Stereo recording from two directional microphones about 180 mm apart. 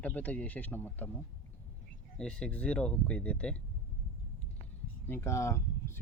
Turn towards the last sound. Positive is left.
turn(degrees=15)  # may be behind; listen again after turning